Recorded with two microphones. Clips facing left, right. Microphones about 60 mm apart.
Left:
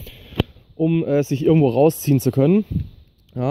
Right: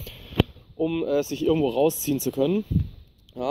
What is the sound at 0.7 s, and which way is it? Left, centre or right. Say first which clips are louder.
Speech: left 5 dB; centre.